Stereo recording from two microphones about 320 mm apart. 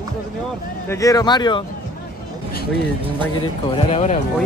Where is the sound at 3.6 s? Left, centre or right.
Centre.